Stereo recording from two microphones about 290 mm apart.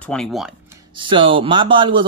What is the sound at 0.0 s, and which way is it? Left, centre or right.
Speech, centre.